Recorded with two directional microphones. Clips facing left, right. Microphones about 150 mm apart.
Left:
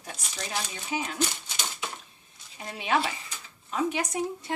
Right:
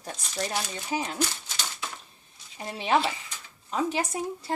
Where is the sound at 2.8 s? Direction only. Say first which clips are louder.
Right 2 dB; 30° right (ahead or behind).